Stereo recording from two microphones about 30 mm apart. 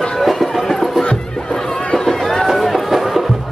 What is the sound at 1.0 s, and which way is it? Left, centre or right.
Music, left.